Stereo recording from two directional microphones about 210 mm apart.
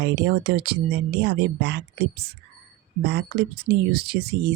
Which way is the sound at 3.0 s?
50° right (ahead or behind).